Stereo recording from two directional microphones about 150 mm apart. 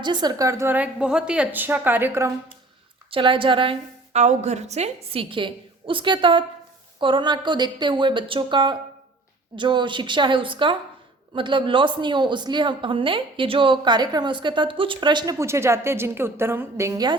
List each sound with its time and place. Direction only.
0.0 s a woman's voice: 30° right (ahead or behind)
3.1 s a woman's voice: 35° right (ahead or behind)
4.1 s a woman's voice: 50° right (ahead or behind); by 17.2 s 25° right (ahead or behind)